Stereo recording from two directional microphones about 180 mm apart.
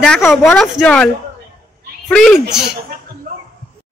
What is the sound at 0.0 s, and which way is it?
Speech, centre (ahead or behind).